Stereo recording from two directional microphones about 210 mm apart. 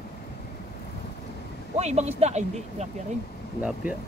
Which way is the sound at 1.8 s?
30° right (ahead or behind).